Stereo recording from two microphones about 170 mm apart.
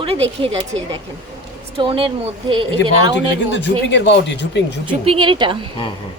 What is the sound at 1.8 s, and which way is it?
Speech, 30° right (ahead or behind).